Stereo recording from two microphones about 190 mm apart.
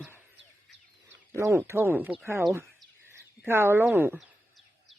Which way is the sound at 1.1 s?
15° right (ahead or behind).